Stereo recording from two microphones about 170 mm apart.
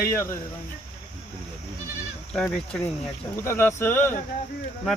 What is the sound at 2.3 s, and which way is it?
Speech, 5° left (ahead or behind).